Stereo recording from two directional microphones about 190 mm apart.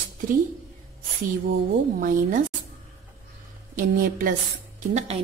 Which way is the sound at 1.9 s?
45° right (ahead or behind).